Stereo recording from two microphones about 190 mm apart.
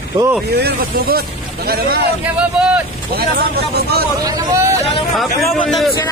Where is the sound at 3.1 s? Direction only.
55° right (ahead or behind).